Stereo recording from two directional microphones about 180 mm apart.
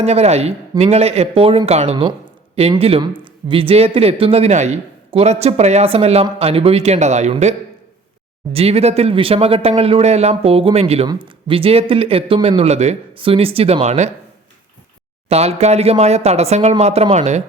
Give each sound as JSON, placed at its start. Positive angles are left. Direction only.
{"t": 0.0, "sound": "speech", "side_deg": -35}
{"t": 8.5, "sound": "speech", "side_deg": -35}
{"t": 15.3, "sound": "speech", "side_deg": -35}